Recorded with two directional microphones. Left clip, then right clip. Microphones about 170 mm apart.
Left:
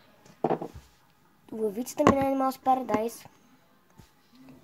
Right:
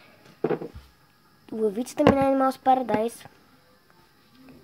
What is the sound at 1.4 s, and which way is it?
Speech, 10° right (ahead or behind).